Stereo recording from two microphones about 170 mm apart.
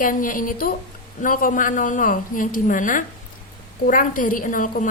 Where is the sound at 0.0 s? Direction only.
55° left (ahead or behind).